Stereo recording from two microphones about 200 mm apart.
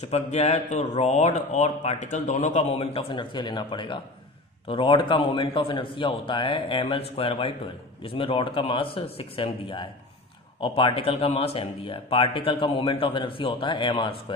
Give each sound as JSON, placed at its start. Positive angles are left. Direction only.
{"t": 0.0, "sound": "a man's voice", "side_deg": 35}